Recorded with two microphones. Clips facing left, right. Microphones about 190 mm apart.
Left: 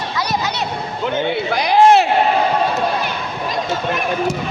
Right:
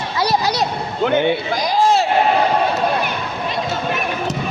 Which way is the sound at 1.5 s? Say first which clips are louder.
Left 8 dB; 65° left (ahead or behind).